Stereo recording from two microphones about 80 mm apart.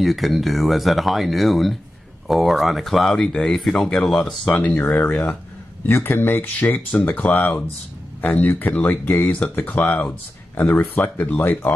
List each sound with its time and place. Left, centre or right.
0.0 s speech: centre
4.5 s speech: centre
5.9 s speech: left